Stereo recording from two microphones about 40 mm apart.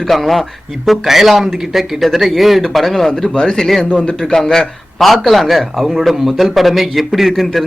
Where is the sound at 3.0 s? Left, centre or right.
Centre.